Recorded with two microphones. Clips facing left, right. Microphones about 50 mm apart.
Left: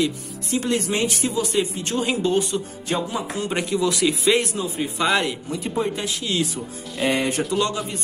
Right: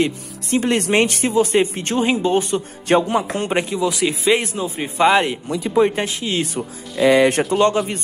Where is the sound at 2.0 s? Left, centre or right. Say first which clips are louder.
Right 4 dB; right.